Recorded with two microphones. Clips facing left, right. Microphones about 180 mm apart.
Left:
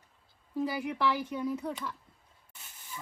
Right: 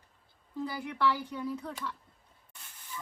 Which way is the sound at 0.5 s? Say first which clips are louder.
Left 3 dB; 20° left (ahead or behind).